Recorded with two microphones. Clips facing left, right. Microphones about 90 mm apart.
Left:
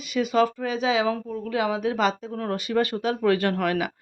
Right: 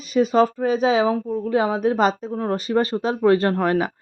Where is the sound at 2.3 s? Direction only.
25° right (ahead or behind).